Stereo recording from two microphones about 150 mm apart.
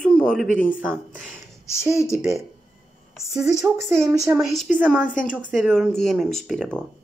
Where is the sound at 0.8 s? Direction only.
10° right (ahead or behind).